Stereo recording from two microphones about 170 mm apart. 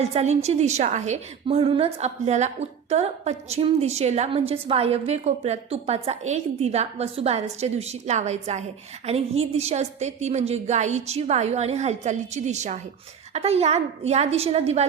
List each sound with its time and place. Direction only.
0.0 s a woman's voice: 40° right (ahead or behind)